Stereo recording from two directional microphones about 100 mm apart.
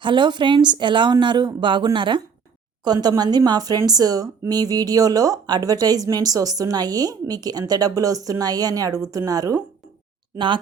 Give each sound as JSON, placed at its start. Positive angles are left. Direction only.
{"t": 0.0, "sound": "a woman's voice", "side_deg": -50}
{"t": 10.3, "sound": "a woman's voice", "side_deg": -50}